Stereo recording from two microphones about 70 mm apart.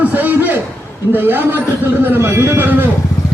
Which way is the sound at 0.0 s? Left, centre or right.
Right.